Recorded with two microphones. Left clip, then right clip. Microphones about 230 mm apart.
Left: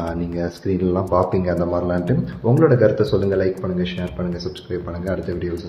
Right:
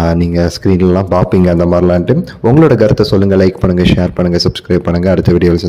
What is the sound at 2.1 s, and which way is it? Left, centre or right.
A man's voice, right.